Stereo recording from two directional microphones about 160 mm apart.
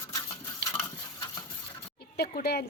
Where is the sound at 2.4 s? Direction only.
80° left.